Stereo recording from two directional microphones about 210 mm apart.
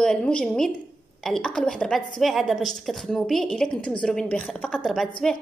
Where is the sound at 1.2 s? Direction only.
Centre (ahead or behind).